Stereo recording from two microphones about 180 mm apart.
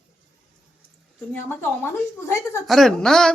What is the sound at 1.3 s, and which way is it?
Speech, 10° left (ahead or behind).